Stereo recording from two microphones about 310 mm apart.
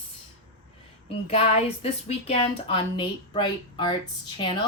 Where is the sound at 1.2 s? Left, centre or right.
Centre.